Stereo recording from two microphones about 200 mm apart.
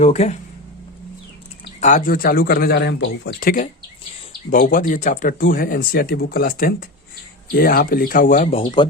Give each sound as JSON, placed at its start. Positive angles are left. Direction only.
{"t": 0.0, "sound": "speech", "side_deg": 35}
{"t": 1.8, "sound": "speech", "side_deg": 40}
{"t": 4.5, "sound": "speech", "side_deg": 40}